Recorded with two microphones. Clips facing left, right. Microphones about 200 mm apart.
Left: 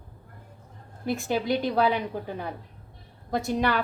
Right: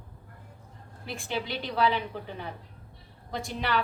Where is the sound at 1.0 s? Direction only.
45° left (ahead or behind).